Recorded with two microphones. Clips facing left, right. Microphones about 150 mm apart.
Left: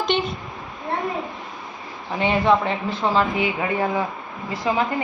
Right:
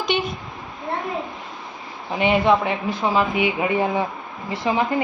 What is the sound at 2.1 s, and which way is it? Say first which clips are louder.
A woman's voice: right 1 dB; 15° right (ahead or behind).